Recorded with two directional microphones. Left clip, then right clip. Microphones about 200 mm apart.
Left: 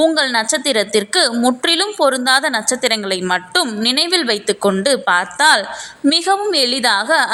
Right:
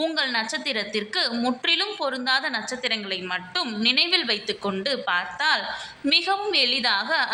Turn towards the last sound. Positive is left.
turn(degrees=45)  # may be behind; listen again after turning